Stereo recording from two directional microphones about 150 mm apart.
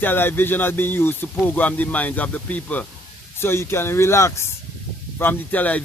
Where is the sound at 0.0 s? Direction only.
15° left (ahead or behind).